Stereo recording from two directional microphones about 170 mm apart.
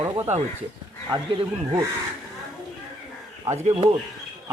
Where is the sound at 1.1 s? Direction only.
25° right (ahead or behind).